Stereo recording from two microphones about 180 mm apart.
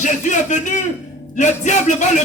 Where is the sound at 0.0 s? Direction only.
45° left (ahead or behind).